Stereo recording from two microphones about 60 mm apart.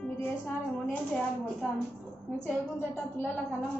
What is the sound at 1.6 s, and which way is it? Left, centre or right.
Speech, centre.